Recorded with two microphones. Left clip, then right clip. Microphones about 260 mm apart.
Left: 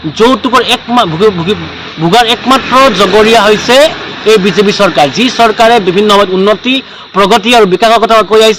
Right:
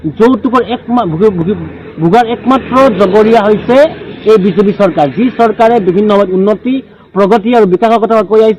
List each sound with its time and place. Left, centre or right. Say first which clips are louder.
0.2 s a man's voice: left 2 dB; left